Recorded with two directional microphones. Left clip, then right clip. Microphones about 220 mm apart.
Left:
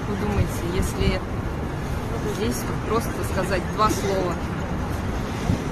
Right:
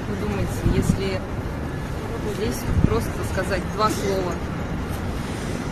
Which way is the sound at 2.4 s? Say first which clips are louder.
Right 1 dB; centre (ahead or behind).